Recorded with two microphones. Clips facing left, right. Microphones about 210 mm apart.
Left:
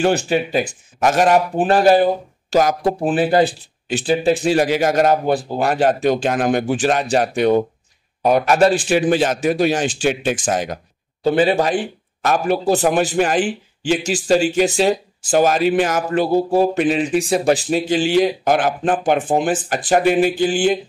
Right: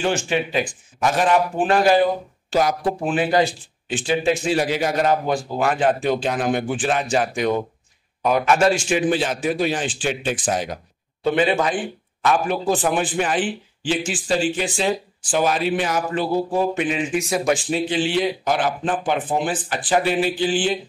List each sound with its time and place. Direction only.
0.0 s a man's voice: 35° left (ahead or behind)
4.6 s a man's voice: 45° left (ahead or behind)